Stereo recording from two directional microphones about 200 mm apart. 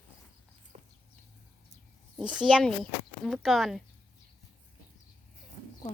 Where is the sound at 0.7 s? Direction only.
35° right (ahead or behind).